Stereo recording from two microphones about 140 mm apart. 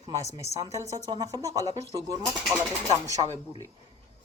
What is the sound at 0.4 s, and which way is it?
A woman's voice, 20° right (ahead or behind).